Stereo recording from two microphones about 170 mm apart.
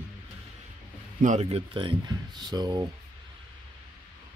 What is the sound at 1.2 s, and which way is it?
Speech, 40° right (ahead or behind).